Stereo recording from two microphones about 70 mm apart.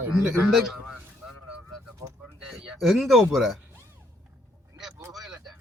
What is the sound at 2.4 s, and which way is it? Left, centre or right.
Speech, centre.